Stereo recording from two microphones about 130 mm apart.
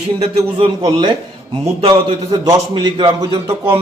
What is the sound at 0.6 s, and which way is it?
Speech, 40° right (ahead or behind).